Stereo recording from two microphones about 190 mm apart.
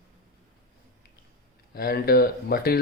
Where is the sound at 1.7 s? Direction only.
50° left (ahead or behind).